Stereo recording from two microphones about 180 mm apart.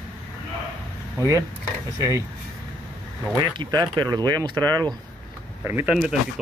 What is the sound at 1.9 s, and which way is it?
Speech, 15° right (ahead or behind).